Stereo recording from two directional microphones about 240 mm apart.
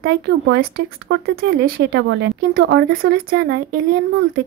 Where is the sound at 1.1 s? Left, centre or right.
Right.